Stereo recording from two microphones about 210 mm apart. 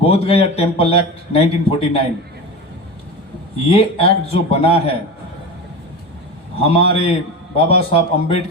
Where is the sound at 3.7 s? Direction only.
25° left (ahead or behind).